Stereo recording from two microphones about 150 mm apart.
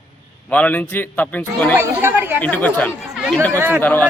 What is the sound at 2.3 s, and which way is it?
Speech, 10° left (ahead or behind).